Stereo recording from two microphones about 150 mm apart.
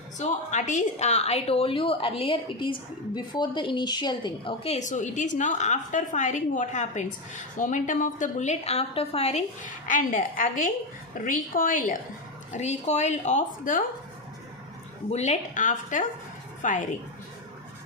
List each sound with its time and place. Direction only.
0.2 s a woman's voice: 55° left (ahead or behind)
12.5 s a woman's voice: 50° left (ahead or behind)
15.1 s a woman's voice: 50° left (ahead or behind)